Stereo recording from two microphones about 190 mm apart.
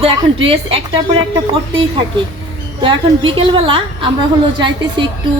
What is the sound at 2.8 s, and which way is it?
A woman's voice, 25° right (ahead or behind).